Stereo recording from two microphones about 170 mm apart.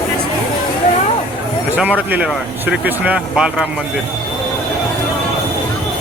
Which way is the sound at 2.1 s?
5° right (ahead or behind).